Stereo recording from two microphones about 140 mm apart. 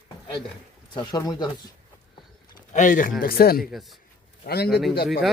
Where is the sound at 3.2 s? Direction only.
90° left.